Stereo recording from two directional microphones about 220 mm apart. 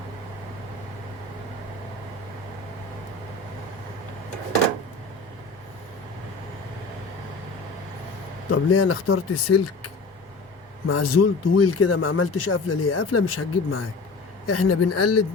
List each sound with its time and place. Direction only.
8.4 s speech: 70° left (ahead or behind)
14.4 s speech: 90° left